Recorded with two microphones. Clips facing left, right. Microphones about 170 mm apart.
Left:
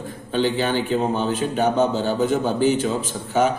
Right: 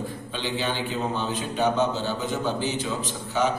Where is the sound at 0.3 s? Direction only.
50° left (ahead or behind).